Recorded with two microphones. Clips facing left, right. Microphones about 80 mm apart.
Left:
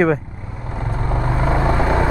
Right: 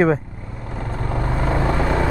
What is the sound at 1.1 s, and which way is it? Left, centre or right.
Vehicle, centre.